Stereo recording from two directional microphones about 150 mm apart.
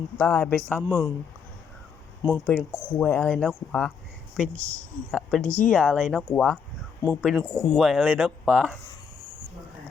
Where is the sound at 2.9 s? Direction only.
10° left (ahead or behind).